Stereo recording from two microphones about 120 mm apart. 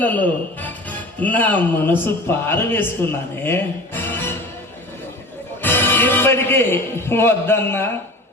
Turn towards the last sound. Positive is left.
turn(degrees=20)  # may be behind; listen again after turning